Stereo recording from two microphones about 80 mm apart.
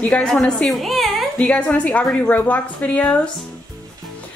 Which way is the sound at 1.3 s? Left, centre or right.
Centre.